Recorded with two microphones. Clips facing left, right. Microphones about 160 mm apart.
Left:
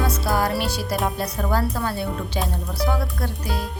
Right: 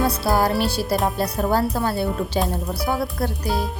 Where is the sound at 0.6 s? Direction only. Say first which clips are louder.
Right 3 dB; 30° right (ahead or behind).